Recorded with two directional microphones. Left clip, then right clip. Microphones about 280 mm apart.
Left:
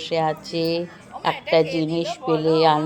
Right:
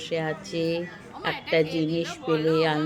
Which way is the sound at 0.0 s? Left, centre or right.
Centre.